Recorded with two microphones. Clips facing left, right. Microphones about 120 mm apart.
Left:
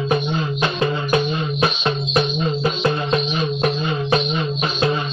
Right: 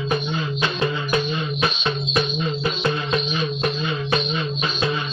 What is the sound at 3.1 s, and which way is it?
Music, 45° left (ahead or behind).